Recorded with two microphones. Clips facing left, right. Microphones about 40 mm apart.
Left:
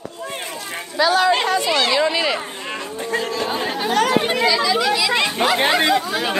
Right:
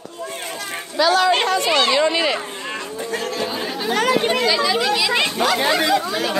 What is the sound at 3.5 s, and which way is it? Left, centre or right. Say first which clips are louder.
Speech: left 3 dB; left.